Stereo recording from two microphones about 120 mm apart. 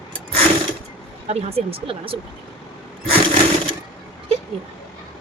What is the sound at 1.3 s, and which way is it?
Speech, 60° right (ahead or behind).